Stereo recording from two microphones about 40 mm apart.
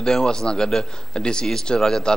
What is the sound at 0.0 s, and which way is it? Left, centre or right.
A man's voice, centre.